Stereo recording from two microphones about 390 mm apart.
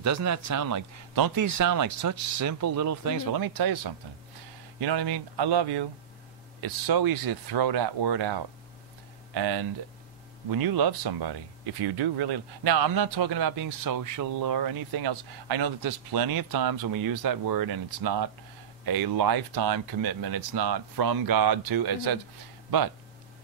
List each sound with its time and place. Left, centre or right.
0.0 s speech: right
2.3 s speech: right
4.7 s speech: right
6.6 s speech: right